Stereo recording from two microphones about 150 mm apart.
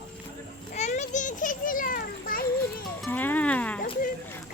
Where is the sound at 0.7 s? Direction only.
50° left (ahead or behind); by 2.4 s 70° left (ahead or behind).